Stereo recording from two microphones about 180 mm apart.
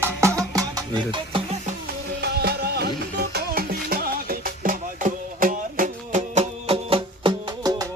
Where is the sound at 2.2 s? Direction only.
65° right (ahead or behind).